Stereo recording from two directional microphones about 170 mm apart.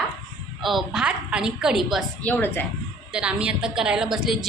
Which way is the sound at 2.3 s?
10° left (ahead or behind).